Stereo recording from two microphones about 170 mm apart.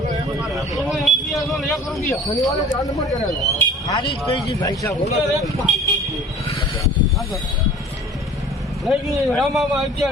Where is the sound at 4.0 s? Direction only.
30° left (ahead or behind).